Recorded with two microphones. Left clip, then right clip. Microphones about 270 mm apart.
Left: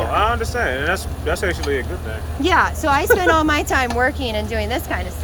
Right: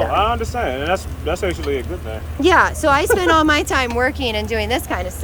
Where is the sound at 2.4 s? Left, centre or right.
Centre.